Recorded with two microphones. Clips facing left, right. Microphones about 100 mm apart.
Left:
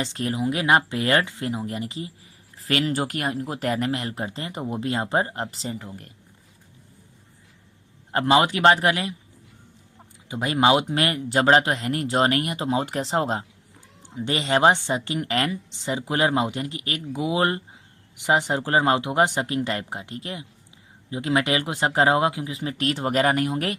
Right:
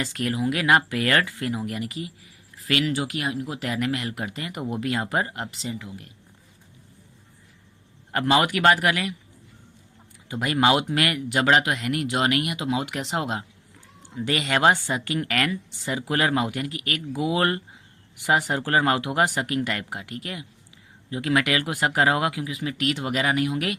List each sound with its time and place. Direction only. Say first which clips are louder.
0.0 s speech: even; 25° left (ahead or behind); by 6.1 s 45° left (ahead or behind)
8.1 s speech: left 2 dB; 25° left (ahead or behind)
10.2 s speech: left 1 dB; 20° left (ahead or behind); by 23.7 s 35° left (ahead or behind)